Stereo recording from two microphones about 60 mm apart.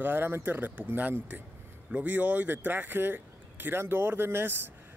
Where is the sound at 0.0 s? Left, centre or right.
Right.